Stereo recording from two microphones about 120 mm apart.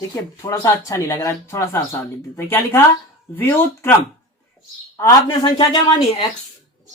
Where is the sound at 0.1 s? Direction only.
30° left (ahead or behind).